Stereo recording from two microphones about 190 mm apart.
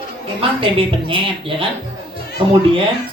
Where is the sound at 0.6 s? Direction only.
30° right (ahead or behind).